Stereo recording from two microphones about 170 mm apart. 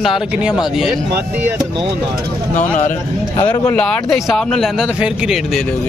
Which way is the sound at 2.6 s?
45° left (ahead or behind).